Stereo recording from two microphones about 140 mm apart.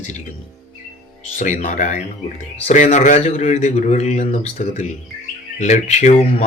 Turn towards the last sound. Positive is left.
turn(degrees=50)  # may be behind; listen again after turning